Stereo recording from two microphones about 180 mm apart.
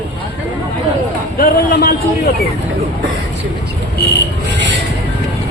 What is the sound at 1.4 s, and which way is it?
Speech, 55° left (ahead or behind).